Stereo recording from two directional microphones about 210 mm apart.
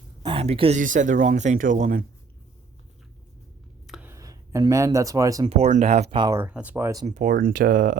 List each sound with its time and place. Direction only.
0.2 s speech: 25° right (ahead or behind)
0.8 s speech: 40° right (ahead or behind)
3.8 s a sound: centre (ahead or behind)
4.1 s speech: 15° right (ahead or behind)
5.5 s speech: 30° right (ahead or behind); by 7.0 s 10° right (ahead or behind)
7.0 s speech: 35° right (ahead or behind)